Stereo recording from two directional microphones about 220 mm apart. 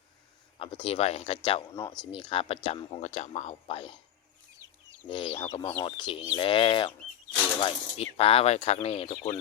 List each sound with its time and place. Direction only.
0.6 s speech: 25° left (ahead or behind)
5.0 s speech: 25° left (ahead or behind)